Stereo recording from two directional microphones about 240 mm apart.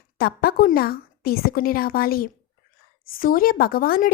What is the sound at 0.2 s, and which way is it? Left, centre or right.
A woman's voice, left.